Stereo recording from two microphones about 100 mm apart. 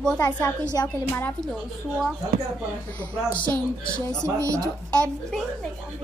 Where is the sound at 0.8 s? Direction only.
35° left (ahead or behind).